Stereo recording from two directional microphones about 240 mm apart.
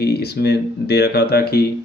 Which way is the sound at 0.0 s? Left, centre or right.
Left.